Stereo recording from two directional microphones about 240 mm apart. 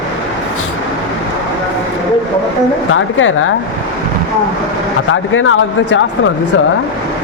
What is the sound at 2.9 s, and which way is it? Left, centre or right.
Speech, left.